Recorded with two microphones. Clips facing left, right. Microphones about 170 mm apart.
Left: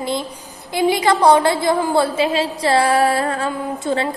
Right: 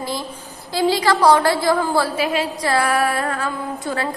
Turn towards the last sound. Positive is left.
turn(degrees=25)  # may be behind; listen again after turning